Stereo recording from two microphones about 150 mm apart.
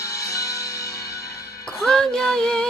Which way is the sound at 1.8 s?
5° left (ahead or behind).